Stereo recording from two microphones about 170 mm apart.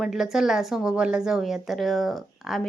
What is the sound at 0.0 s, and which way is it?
A woman's voice, centre (ahead or behind).